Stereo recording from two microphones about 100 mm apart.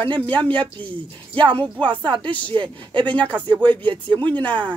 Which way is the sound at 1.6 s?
55° right (ahead or behind).